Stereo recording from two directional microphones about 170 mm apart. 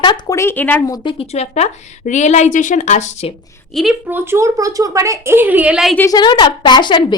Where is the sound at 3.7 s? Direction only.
Centre (ahead or behind).